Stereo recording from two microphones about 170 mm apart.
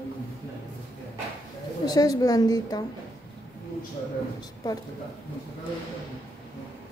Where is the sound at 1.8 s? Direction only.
20° left (ahead or behind).